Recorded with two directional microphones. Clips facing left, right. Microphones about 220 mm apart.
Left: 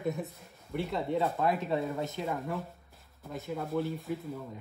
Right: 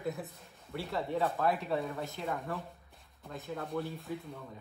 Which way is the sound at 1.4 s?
20° left (ahead or behind).